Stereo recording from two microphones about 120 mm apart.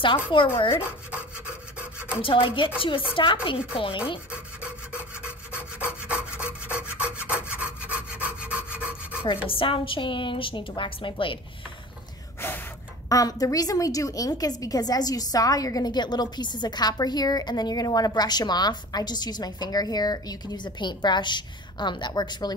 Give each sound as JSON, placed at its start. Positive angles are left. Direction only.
{"t": 0.0, "sound": "a woman's voice", "side_deg": 45}
{"t": 0.8, "sound": "rub", "side_deg": -10}
{"t": 2.2, "sound": "a woman's voice", "side_deg": 45}
{"t": 4.3, "sound": "rub", "side_deg": -10}
{"t": 9.5, "sound": "a woman's voice", "side_deg": 45}
{"t": 12.4, "sound": "gasp", "side_deg": 15}
{"t": 13.1, "sound": "a woman's voice", "side_deg": 30}